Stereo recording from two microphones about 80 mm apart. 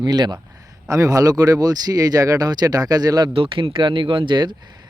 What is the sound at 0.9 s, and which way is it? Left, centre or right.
Speech, right.